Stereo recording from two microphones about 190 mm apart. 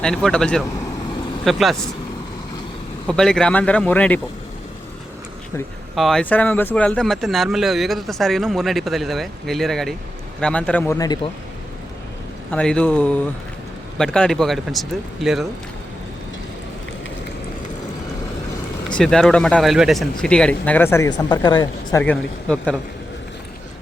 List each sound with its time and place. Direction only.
0.0 s speech: 5° left (ahead or behind)
3.1 s speech: 5° left (ahead or behind)
6.0 s speech: centre (ahead or behind); by 11.3 s 20° left (ahead or behind)
12.5 s speech: 5° left (ahead or behind)
18.9 s speech: 5° left (ahead or behind); by 22.0 s 20° left (ahead or behind)
22.0 s speech: 5° left (ahead or behind)